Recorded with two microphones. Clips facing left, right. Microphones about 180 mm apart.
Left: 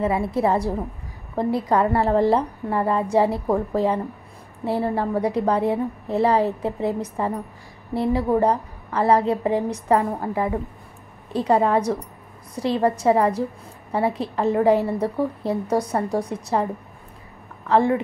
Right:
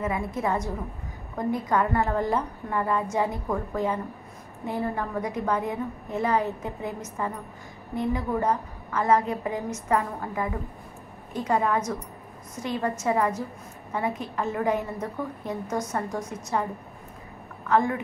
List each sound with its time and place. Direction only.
0.0 s a woman's voice: 30° left (ahead or behind)
17.6 s a woman's voice: 30° left (ahead or behind)